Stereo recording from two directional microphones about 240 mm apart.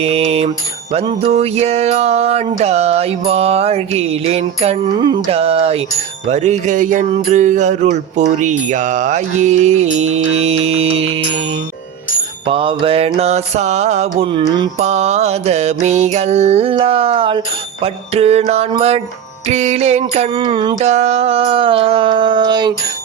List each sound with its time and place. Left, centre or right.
0.0 s mantra: right
12.5 s mantra: right